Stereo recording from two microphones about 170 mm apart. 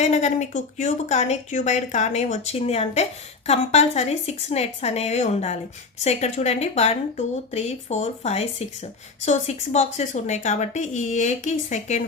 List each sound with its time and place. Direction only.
0.0 s a woman's voice: 40° left (ahead or behind)